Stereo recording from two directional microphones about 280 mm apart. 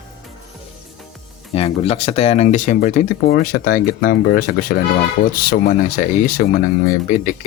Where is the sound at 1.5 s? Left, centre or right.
Left.